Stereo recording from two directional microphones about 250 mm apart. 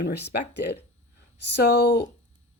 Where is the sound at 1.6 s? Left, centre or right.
Left.